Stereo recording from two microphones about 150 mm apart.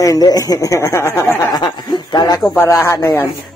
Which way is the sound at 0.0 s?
25° left (ahead or behind).